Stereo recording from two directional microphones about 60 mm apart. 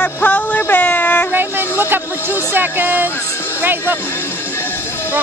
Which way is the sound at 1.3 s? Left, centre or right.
Right.